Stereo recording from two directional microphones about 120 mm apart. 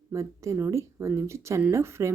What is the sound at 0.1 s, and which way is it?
Speech, 25° right (ahead or behind).